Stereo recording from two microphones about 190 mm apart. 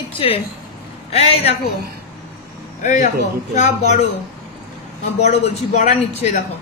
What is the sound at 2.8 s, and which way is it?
A man's voice, 40° left (ahead or behind).